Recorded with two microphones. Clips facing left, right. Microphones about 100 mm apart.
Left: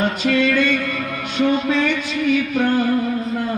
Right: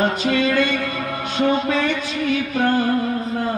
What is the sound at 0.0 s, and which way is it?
Music, 20° right (ahead or behind).